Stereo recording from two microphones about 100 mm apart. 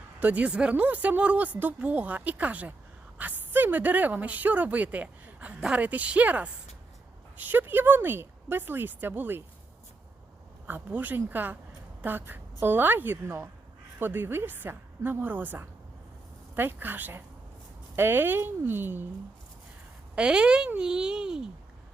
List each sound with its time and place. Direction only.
0.2 s speech: 15° right (ahead or behind)
10.7 s speech: 20° right (ahead or behind)
20.1 s speech: 10° right (ahead or behind)